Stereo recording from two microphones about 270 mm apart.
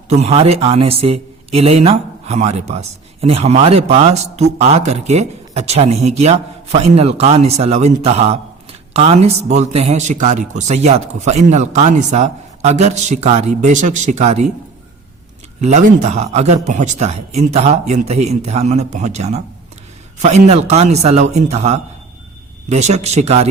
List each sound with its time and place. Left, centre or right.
0.1 s speech: right
15.6 s speech: right